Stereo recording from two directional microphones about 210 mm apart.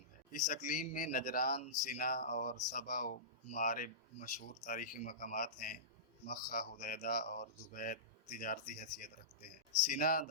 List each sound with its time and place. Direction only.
0.3 s speech: 40° left (ahead or behind)